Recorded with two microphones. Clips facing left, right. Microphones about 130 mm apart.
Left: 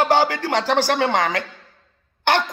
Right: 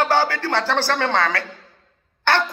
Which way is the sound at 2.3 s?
15° left (ahead or behind).